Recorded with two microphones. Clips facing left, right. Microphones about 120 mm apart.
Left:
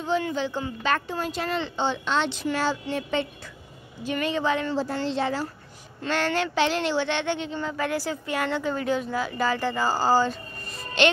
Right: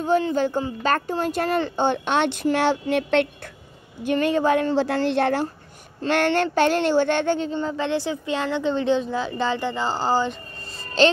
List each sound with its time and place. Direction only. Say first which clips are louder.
0.1 s speech: right 5 dB; 50° right (ahead or behind)
2.5 s a sound: right 6 dB; 65° right (ahead or behind)
4.0 s speech: right 6 dB; 50° right (ahead or behind)
4.7 s speech: right 6 dB; 80° right; by 7.5 s 40° right (ahead or behind)
7.7 s speech: right 3 dB; 25° right (ahead or behind)
11.0 s music: right 4 dB; 35° right (ahead or behind)